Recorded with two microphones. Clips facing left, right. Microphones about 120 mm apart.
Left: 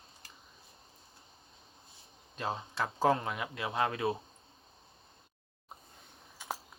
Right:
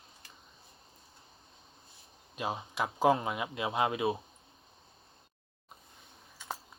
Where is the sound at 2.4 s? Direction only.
15° right (ahead or behind).